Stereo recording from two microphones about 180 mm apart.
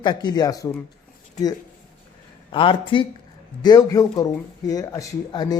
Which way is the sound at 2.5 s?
25° left (ahead or behind).